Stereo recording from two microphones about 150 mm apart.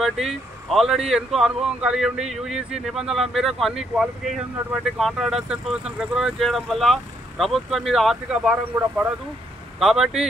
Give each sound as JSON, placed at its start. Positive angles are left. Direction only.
{"t": 0.0, "sound": "speech", "side_deg": 0}